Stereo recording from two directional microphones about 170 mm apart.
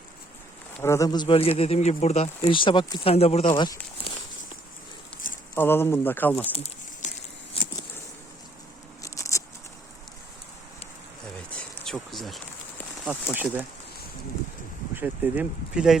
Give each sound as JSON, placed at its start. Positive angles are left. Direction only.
{"t": 0.8, "sound": "speech", "side_deg": 15}
{"t": 5.1, "sound": "a sound", "side_deg": 5}
{"t": 5.5, "sound": "speech", "side_deg": 15}
{"t": 6.5, "sound": "a sound", "side_deg": 35}
{"t": 9.0, "sound": "patter", "side_deg": 20}
{"t": 11.9, "sound": "speech", "side_deg": 0}
{"t": 13.3, "sound": "speech", "side_deg": -10}
{"t": 14.9, "sound": "speech", "side_deg": -10}